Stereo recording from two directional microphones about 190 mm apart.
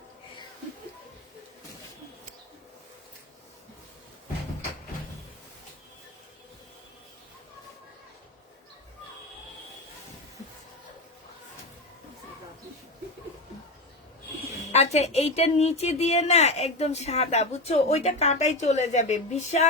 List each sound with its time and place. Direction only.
14.7 s speech: 35° left (ahead or behind)